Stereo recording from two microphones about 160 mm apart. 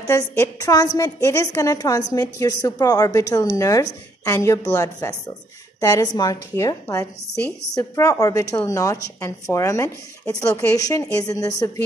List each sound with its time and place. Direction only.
0.0 s a woman's voice: 20° left (ahead or behind)